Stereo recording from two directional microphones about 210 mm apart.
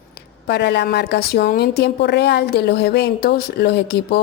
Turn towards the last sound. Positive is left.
turn(degrees=50)  # may be behind; listen again after turning